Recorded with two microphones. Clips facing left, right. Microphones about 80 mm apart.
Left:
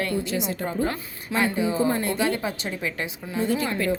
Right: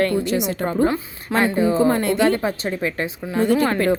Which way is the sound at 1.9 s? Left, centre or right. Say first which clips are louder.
Right 6 dB; right.